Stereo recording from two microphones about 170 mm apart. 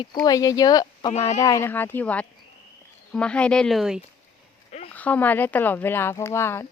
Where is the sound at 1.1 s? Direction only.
40° left (ahead or behind).